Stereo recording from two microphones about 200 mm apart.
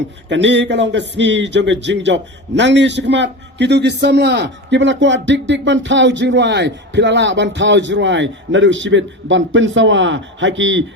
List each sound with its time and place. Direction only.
0.3 s a man's voice: 60° right (ahead or behind)